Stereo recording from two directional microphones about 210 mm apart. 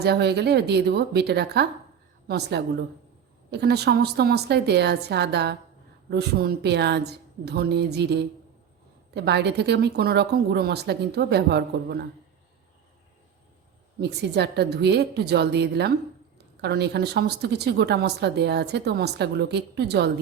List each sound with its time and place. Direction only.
0.0 s a woman's voice: 50° right (ahead or behind)
14.0 s a woman's voice: 50° right (ahead or behind)